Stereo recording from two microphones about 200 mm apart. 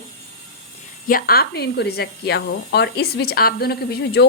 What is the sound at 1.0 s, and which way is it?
Speech, 45° left (ahead or behind).